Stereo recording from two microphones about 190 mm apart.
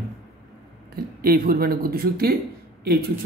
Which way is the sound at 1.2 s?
50° right (ahead or behind).